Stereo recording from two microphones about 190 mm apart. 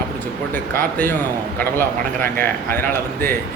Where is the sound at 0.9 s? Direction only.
10° left (ahead or behind).